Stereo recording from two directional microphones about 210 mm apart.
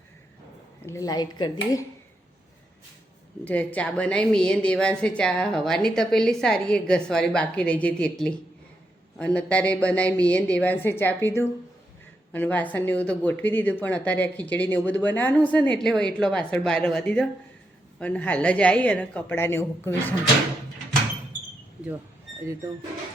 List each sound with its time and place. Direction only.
0.8 s speech: 15° left (ahead or behind)
3.4 s a woman's voice: 5° left (ahead or behind)